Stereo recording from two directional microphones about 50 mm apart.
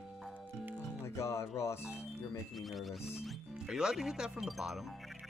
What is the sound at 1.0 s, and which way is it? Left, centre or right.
Speech, left.